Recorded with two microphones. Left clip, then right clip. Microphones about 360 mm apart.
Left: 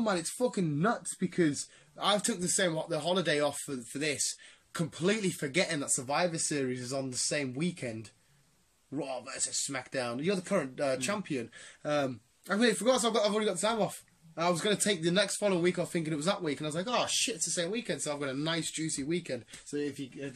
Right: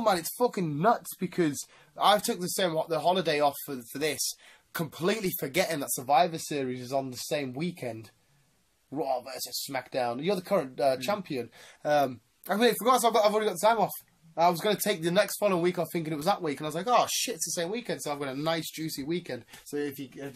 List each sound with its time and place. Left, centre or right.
0.0 s speech: centre
9.0 s speech: centre